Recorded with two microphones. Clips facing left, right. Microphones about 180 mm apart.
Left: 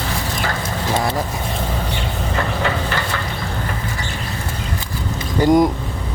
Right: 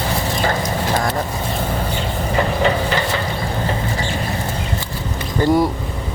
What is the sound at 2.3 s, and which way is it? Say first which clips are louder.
Train: right 5 dB; 20° right (ahead or behind).